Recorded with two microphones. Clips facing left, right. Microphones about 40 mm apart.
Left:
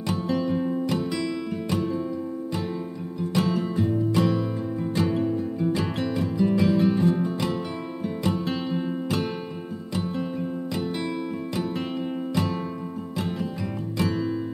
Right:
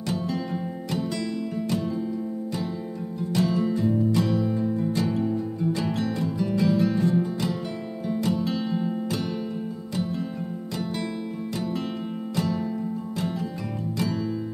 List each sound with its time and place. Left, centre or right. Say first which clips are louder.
0.1 s music: left 4 dB; left
3.3 s music: right 1 dB; left
12.4 s music: right 1 dB; left